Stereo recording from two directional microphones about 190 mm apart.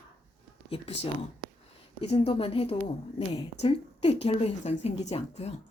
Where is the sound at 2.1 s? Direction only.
30° left (ahead or behind).